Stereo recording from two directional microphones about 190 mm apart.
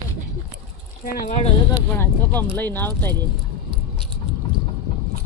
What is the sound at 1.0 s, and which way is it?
Speech, 50° left (ahead or behind).